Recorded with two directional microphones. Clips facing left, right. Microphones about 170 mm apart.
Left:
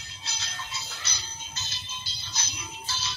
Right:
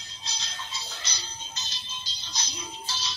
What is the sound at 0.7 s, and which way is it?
Music, 15° right (ahead or behind).